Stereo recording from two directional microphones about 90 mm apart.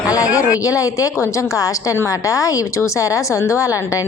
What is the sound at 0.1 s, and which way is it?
A woman's voice, 40° left (ahead or behind).